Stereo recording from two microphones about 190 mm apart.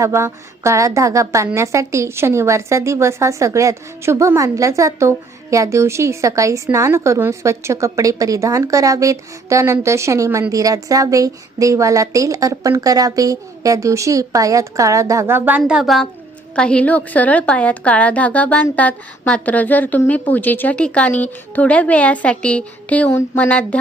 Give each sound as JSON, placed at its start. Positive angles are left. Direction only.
{"t": 0.0, "sound": "a woman's voice", "side_deg": -15}